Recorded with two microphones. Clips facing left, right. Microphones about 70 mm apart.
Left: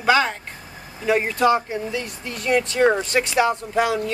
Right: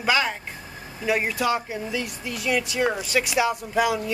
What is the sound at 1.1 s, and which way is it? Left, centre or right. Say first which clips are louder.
Speech: left 4 dB; centre.